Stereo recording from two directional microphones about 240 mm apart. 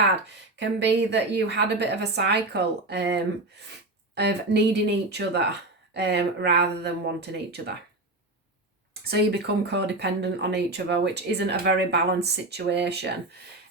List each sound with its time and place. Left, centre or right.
0.3 s speech: right
8.9 s speech: right